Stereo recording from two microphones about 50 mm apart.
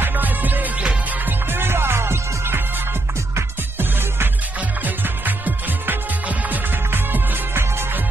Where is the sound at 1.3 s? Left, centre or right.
Right.